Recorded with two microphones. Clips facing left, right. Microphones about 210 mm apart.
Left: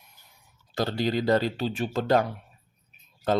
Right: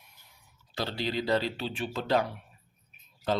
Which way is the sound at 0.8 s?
45° left (ahead or behind).